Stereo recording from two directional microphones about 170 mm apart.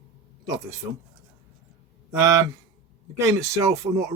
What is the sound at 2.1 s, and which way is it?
Speech, 20° right (ahead or behind).